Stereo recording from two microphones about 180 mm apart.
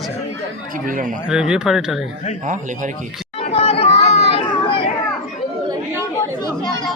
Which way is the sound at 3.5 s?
30° left (ahead or behind).